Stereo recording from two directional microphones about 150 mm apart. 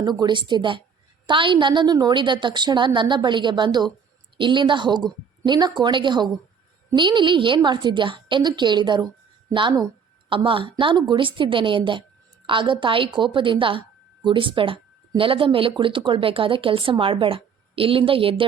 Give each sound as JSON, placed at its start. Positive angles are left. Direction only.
{"t": 0.0, "sound": "a woman's voice", "side_deg": -30}